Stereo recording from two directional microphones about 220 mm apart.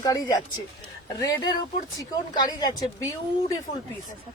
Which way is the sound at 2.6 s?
15° left (ahead or behind).